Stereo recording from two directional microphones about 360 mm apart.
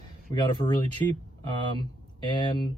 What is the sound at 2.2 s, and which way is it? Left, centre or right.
Speech, centre.